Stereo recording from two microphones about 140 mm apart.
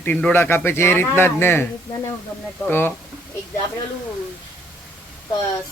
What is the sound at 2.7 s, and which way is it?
Speech, 15° left (ahead or behind).